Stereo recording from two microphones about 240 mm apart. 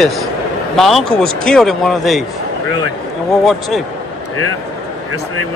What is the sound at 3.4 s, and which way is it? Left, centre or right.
Speech, centre.